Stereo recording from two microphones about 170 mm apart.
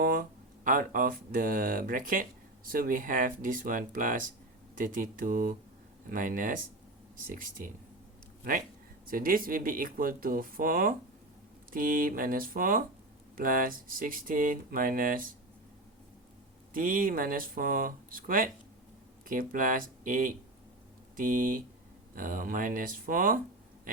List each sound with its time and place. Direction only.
0.0 s speech: 55° right (ahead or behind)
16.7 s speech: 55° right (ahead or behind)